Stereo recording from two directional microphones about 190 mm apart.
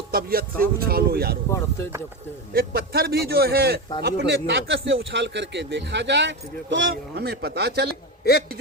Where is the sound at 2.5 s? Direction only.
55° right (ahead or behind).